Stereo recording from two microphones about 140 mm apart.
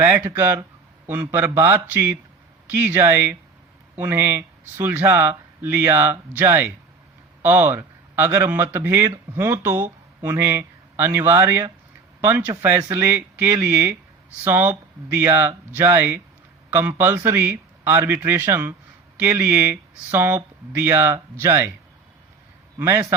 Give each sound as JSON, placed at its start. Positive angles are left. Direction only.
{"t": 0.0, "sound": "speech", "side_deg": -20}
{"t": 22.8, "sound": "a man's voice", "side_deg": -20}